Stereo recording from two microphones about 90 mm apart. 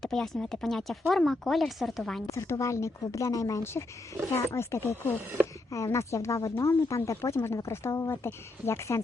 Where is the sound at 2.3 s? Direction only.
35° left (ahead or behind).